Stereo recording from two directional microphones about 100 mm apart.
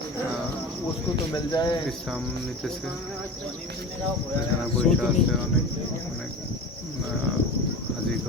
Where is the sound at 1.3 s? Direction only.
45° left (ahead or behind).